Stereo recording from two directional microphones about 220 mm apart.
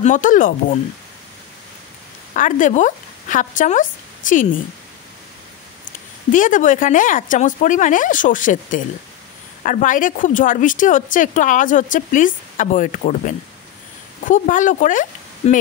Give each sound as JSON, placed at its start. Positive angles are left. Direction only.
{"t": 0.0, "sound": "speech", "side_deg": 35}
{"t": 2.3, "sound": "speech", "side_deg": 35}
{"t": 6.3, "sound": "speech", "side_deg": 35}